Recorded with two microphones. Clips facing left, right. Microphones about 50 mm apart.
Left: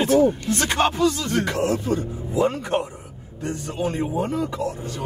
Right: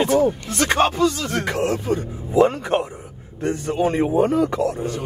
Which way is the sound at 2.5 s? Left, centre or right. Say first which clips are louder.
Right 2 dB; right.